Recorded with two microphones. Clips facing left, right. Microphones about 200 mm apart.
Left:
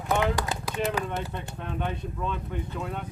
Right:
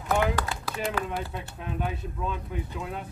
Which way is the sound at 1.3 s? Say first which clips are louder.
Even; 5° right (ahead or behind).